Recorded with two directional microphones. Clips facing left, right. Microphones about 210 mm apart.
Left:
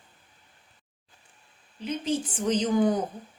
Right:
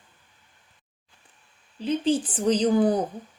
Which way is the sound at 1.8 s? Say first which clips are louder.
Right 5 dB; 30° right (ahead or behind).